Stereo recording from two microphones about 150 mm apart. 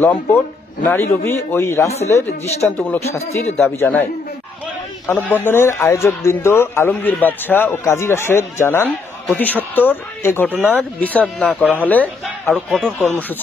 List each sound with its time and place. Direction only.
0.0 s speech: 15° left (ahead or behind)